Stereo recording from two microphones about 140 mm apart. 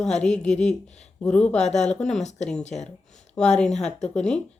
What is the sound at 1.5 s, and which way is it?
Speech, 55° left (ahead or behind).